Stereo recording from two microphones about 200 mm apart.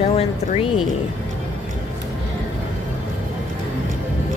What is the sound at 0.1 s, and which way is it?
Speech, 30° left (ahead or behind).